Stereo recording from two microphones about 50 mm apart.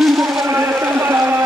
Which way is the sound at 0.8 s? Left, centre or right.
Right.